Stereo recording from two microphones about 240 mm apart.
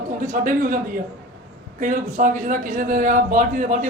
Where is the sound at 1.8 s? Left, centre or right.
Right.